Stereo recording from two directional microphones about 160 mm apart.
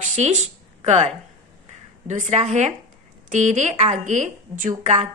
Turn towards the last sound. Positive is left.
turn(degrees=-50)  # may be behind; listen again after turning